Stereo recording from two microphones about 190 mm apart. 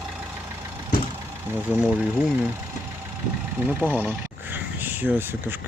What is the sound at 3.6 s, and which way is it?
Speech, 10° right (ahead or behind).